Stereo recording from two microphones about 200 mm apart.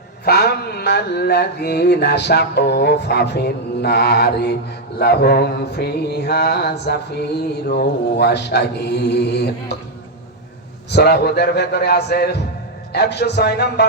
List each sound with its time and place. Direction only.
0.3 s mantra: 50° left (ahead or behind)
10.9 s a man's voice: 55° left (ahead or behind)
12.9 s mantra: 55° left (ahead or behind)